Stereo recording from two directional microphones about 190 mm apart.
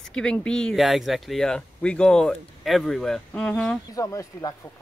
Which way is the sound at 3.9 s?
20° left (ahead or behind).